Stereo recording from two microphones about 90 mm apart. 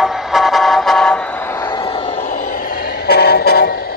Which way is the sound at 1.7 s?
75° left (ahead or behind).